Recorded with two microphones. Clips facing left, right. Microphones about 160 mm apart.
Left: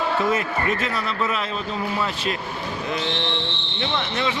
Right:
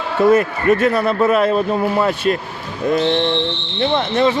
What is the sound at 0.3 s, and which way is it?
Speech, 55° right (ahead or behind).